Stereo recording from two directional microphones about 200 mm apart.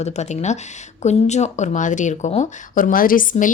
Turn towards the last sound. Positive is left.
turn(degrees=40)  # may be behind; listen again after turning